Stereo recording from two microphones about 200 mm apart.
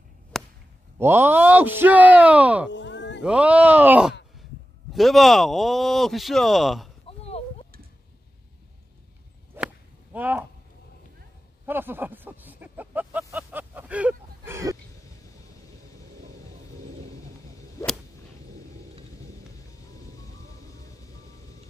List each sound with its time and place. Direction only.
0.3 s a sound: centre (ahead or behind)
0.9 s speech: 10° right (ahead or behind)
2.7 s music: 65° left (ahead or behind)
3.2 s speech: 5° right (ahead or behind)
7.1 s a sound: 30° left (ahead or behind)
9.6 s whip: 10° right (ahead or behind)
10.1 s speech: 10° right (ahead or behind)
11.6 s a sound: 10° right (ahead or behind)
17.8 s whip: 15° left (ahead or behind)